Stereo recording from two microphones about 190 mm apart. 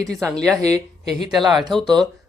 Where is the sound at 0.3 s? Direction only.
5° left (ahead or behind).